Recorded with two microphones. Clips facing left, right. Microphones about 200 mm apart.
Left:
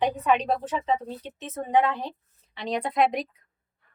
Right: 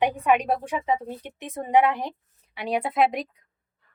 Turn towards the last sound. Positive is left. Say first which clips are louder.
# right 1 dB
turn(degrees=0)  # may be behind; listen again after turning